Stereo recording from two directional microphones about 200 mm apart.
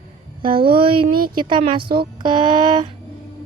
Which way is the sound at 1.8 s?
50° right (ahead or behind).